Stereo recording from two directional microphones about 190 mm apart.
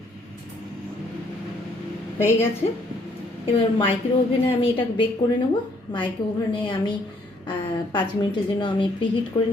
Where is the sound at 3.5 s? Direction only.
30° left (ahead or behind).